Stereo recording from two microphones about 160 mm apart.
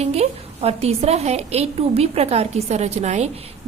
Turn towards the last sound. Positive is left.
turn(degrees=-45)  # may be behind; listen again after turning